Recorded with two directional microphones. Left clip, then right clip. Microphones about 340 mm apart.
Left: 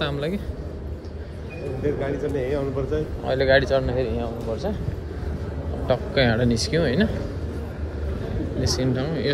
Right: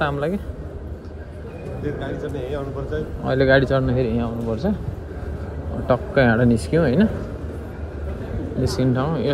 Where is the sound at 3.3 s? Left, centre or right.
Centre.